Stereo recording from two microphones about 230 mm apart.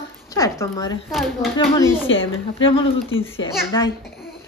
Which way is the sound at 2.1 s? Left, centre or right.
Left.